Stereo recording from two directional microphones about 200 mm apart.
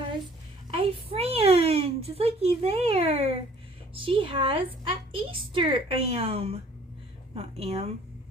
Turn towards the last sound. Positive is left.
turn(degrees=-30)  # may be behind; listen again after turning